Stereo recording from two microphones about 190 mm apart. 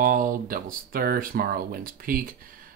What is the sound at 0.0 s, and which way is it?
Speech, 45° right (ahead or behind).